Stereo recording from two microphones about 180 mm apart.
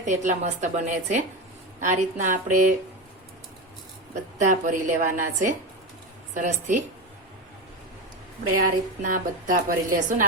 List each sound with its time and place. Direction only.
0.0 s a woman's voice: 40° right (ahead or behind)
4.1 s a woman's voice: 45° right (ahead or behind)
8.5 s a woman's voice: 50° right (ahead or behind)